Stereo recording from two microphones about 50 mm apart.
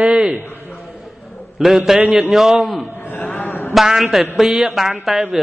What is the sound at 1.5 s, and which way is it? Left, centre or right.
A man's voice, centre.